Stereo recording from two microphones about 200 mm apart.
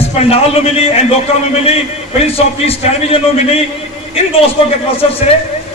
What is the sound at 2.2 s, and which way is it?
A man's voice, 30° left (ahead or behind).